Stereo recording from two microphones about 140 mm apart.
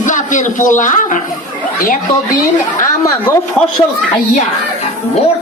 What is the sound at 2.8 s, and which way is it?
Speech, 20° left (ahead or behind).